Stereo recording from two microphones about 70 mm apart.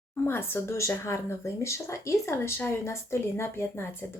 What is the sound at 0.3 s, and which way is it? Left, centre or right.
A woman's voice, left.